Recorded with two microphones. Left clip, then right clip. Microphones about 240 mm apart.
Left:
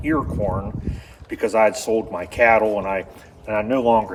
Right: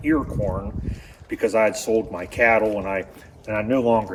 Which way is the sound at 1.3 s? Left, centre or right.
Centre.